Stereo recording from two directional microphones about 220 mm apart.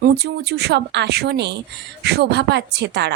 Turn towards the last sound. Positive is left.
turn(degrees=-50)  # may be behind; listen again after turning